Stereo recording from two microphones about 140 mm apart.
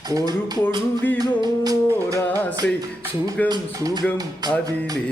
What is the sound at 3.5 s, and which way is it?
Music, 30° right (ahead or behind).